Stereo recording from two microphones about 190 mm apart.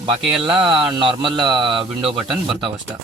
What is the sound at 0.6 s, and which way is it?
Speech, 25° right (ahead or behind).